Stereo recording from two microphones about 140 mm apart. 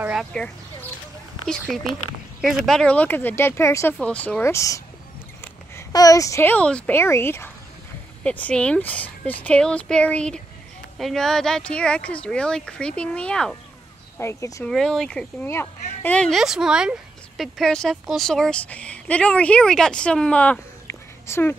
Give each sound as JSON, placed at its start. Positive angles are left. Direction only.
{"t": 0.0, "sound": "a sound", "side_deg": -5}
{"t": 0.3, "sound": "speech", "side_deg": 5}
{"t": 4.0, "sound": "speech", "side_deg": 10}
{"t": 14.1, "sound": "speech", "side_deg": 20}
{"t": 14.6, "sound": "speech", "side_deg": 5}
{"t": 15.4, "sound": "speech", "side_deg": 15}